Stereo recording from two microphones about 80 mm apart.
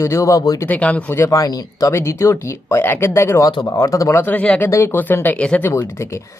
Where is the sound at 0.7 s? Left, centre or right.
Centre.